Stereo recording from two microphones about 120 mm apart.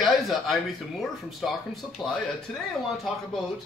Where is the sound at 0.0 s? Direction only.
Centre (ahead or behind).